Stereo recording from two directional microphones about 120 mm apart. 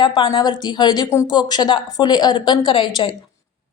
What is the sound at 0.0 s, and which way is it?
A woman's voice, 40° left (ahead or behind).